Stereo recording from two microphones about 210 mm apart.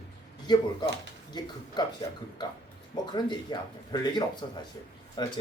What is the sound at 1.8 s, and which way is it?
Speech, 20° left (ahead or behind).